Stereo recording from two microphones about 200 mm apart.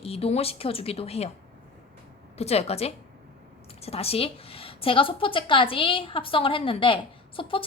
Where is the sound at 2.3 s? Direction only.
30° left (ahead or behind).